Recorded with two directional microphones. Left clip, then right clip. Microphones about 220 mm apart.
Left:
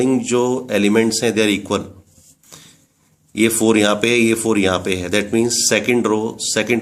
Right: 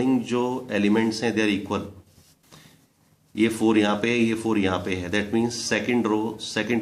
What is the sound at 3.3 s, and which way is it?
Speech, 40° left (ahead or behind).